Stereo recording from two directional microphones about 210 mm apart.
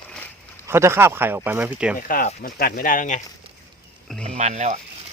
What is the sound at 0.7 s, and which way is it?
Speech, 10° right (ahead or behind).